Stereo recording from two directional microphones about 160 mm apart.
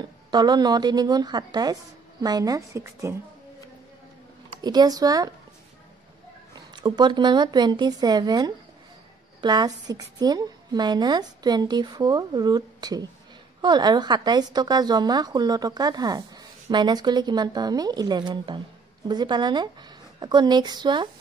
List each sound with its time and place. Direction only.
0.0 s a woman's voice: 25° right (ahead or behind)
4.6 s a woman's voice: 25° right (ahead or behind)
6.7 s a woman's voice: 25° right (ahead or behind)